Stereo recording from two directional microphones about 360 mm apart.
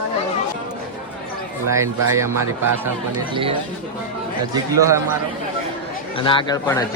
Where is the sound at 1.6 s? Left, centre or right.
Centre.